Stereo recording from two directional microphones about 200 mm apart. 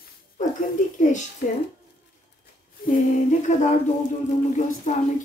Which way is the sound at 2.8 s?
35° left (ahead or behind).